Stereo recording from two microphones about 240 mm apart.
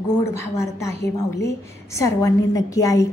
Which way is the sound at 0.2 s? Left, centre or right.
Centre.